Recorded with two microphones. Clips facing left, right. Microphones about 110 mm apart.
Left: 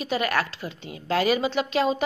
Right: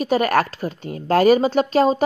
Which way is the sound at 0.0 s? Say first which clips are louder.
Right 7 dB; 45° right (ahead or behind).